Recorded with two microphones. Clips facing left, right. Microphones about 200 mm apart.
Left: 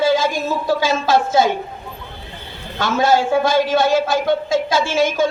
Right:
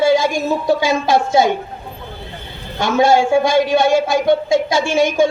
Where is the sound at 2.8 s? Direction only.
15° right (ahead or behind).